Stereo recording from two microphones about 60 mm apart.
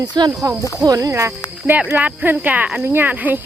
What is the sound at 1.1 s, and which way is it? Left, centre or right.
Speech, right.